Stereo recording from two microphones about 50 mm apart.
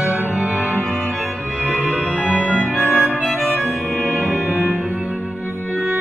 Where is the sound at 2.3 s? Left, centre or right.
Left.